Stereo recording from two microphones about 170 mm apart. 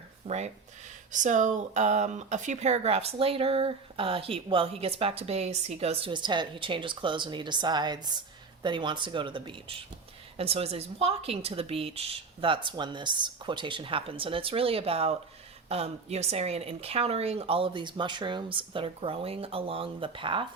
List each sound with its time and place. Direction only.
0.3 s speech: 40° right (ahead or behind)